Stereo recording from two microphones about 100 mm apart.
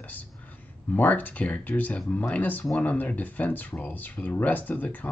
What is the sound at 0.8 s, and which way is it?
Speech, 15° left (ahead or behind).